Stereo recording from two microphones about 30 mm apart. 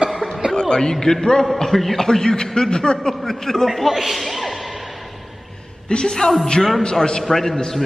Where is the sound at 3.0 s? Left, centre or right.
Centre.